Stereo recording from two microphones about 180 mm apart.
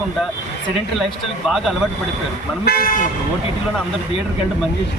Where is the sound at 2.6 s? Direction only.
55° left (ahead or behind).